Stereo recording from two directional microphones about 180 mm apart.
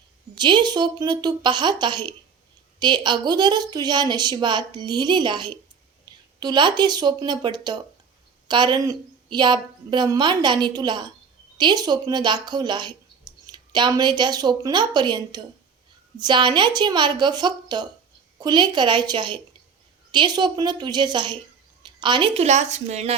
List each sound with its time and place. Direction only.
0.3 s a woman's voice: 25° right (ahead or behind)
6.1 s a sound: 25° right (ahead or behind)
6.4 s a woman's voice: 25° right (ahead or behind)
22.4 s a woman's voice: 40° right (ahead or behind)